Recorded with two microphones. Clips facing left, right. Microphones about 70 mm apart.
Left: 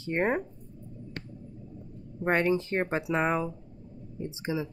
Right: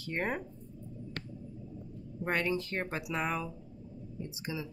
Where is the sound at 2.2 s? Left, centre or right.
Left.